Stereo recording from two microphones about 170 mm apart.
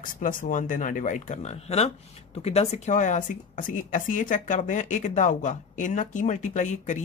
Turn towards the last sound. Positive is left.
turn(degrees=45)  # may be behind; listen again after turning